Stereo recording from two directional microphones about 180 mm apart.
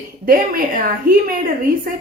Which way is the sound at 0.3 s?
50° right (ahead or behind).